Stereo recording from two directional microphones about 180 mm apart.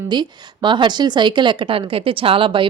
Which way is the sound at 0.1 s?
25° right (ahead or behind).